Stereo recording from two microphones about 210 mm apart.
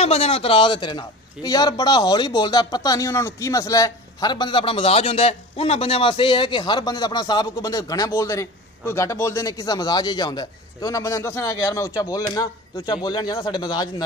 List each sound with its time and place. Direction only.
0.0 s a man's voice: 30° left (ahead or behind)